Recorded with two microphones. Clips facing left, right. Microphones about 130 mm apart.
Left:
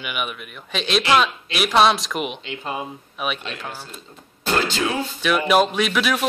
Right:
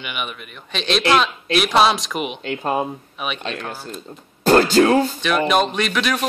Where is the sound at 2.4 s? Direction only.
50° right (ahead or behind).